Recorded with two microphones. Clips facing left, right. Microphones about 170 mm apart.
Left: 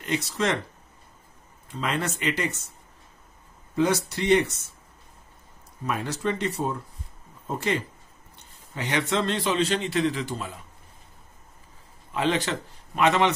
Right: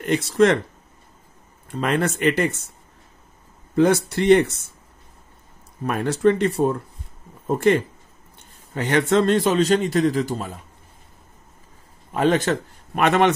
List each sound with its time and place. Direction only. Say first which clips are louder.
0.0 s speech: right 9 dB; 55° right (ahead or behind)
1.7 s speech: right 7 dB; 55° right (ahead or behind)
3.7 s speech: right 6 dB; 55° right (ahead or behind)
5.9 s a man's voice: right 9 dB; 55° right (ahead or behind)
12.1 s speech: right 6 dB; 45° right (ahead or behind)